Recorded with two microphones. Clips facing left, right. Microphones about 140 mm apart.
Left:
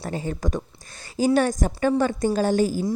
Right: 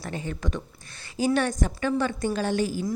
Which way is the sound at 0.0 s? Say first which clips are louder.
Left 4 dB; 35° left (ahead or behind).